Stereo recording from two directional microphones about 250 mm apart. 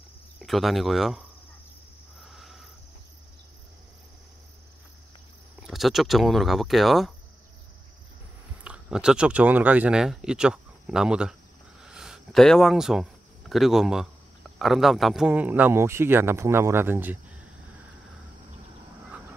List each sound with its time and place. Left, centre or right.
0.4 s speech: centre
2.2 s a sound: centre
5.6 s speech: centre
8.6 s speech: centre
11.8 s a sound: centre
14.6 s a man's voice: centre